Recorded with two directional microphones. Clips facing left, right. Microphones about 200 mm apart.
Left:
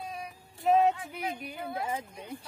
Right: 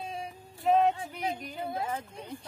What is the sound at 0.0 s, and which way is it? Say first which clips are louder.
Music: right 2 dB; 25° right (ahead or behind).